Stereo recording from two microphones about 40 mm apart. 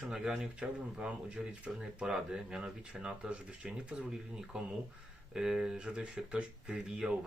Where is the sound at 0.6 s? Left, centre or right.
Right.